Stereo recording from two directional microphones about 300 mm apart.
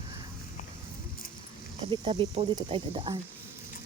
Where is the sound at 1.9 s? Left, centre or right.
Centre.